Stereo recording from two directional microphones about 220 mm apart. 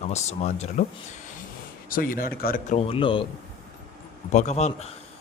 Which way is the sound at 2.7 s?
25° left (ahead or behind).